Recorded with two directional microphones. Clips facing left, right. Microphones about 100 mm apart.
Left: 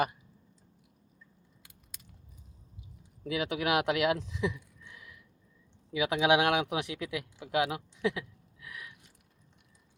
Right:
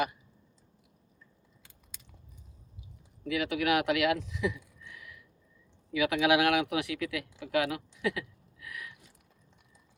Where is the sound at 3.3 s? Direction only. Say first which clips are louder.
Right 1 dB; 30° left (ahead or behind).